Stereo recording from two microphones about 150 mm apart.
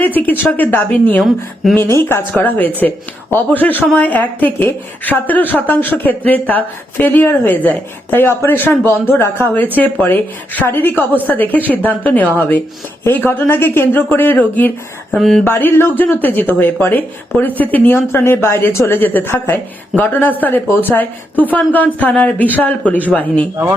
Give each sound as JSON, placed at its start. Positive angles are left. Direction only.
{"t": 0.0, "sound": "a woman's voice", "side_deg": 10}
{"t": 15.4, "sound": "a woman's voice", "side_deg": 15}